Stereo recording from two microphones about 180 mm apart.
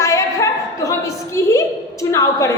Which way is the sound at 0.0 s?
15° left (ahead or behind).